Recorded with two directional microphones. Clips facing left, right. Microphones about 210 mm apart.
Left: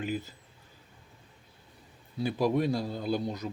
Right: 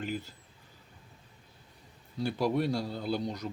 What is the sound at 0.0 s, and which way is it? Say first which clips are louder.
Speech: left 2 dB; 10° left (ahead or behind).